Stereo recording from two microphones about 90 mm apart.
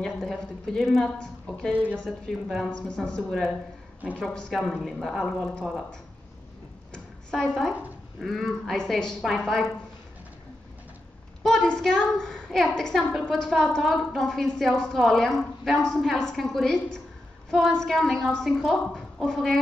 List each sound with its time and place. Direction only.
0.0 s a woman's voice: 5° left (ahead or behind)
6.9 s a sound: 10° left (ahead or behind)
8.2 s a woman's voice: centre (ahead or behind)
11.4 s a woman's voice: 5° left (ahead or behind)